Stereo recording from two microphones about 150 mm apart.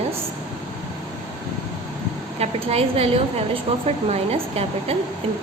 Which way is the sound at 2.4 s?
40° right (ahead or behind).